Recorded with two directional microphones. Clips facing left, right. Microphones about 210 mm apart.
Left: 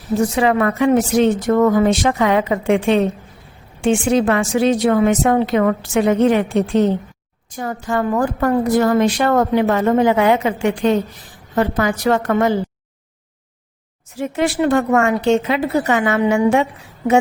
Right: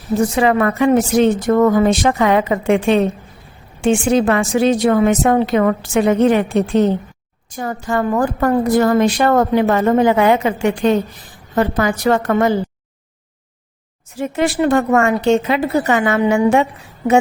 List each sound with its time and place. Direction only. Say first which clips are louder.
0.3 s a woman's voice: right 2 dB; 50° right (ahead or behind)
14.2 s a woman's voice: right 1 dB; 45° right (ahead or behind)